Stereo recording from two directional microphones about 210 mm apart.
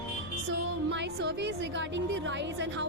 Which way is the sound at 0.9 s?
55° right (ahead or behind).